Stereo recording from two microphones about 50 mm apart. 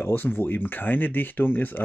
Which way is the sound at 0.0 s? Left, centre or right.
Left.